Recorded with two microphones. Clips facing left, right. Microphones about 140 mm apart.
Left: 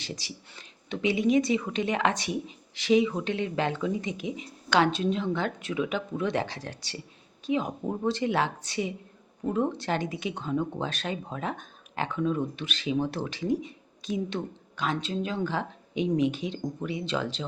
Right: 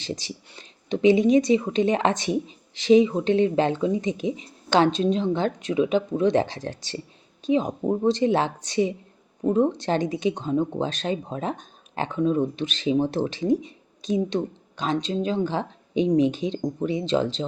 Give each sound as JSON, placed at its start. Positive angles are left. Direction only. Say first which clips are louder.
{"t": 0.0, "sound": "speech", "louder": "right 7 dB", "side_deg": -25}
{"t": 15.1, "sound": "speech", "louder": "right 5 dB", "side_deg": -25}